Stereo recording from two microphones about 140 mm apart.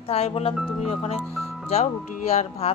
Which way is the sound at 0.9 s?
45° left (ahead or behind).